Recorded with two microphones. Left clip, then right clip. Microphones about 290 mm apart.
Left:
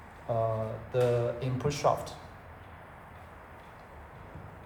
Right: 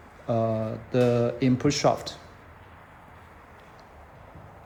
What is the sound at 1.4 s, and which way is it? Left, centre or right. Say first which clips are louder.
Speech: right 8 dB; right.